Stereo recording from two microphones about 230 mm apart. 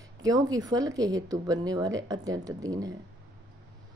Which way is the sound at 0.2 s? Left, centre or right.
Centre.